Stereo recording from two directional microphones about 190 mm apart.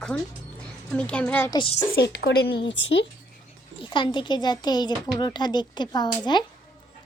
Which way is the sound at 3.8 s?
25° left (ahead or behind).